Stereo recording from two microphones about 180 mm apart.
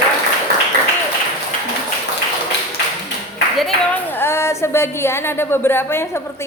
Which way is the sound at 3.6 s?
5° left (ahead or behind).